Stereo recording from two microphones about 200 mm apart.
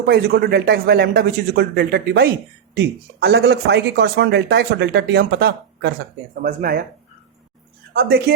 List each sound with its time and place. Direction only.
0.0 s speech: 55° right (ahead or behind)
2.7 s speech: 60° right (ahead or behind)